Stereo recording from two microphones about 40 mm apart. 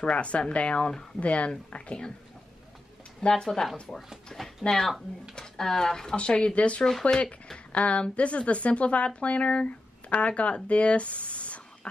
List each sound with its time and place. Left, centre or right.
0.0 s a woman's voice: left
1.8 s a woman's voice: left
3.2 s speech: centre
6.1 s a woman's voice: left
6.8 s speech: centre
7.5 s a woman's voice: left